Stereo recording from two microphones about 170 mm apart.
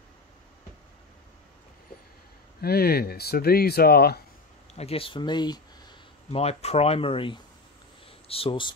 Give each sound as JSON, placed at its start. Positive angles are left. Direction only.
{"t": 2.6, "sound": "speech", "side_deg": 65}
{"t": 4.7, "sound": "a sound", "side_deg": 35}
{"t": 6.4, "sound": "speech", "side_deg": 40}